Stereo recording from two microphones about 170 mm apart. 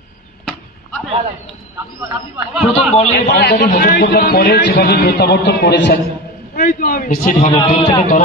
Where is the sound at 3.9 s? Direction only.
75° left (ahead or behind); by 5.9 s 90° left.